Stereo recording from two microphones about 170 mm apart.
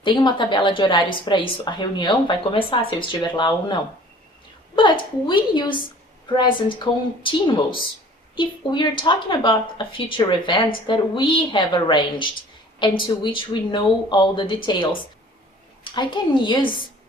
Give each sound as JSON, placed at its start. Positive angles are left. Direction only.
{"t": 0.0, "sound": "a woman's voice", "side_deg": 25}